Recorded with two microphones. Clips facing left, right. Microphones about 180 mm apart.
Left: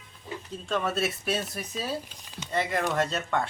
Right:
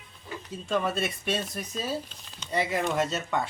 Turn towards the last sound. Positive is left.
turn(degrees=-5)  # may be behind; listen again after turning